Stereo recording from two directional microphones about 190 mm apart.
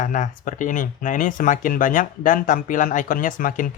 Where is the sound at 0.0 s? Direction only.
40° left (ahead or behind).